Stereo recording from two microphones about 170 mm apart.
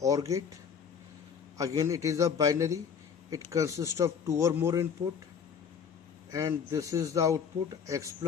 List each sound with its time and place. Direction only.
0.0 s a man's voice: 20° right (ahead or behind)
6.3 s a man's voice: 20° right (ahead or behind)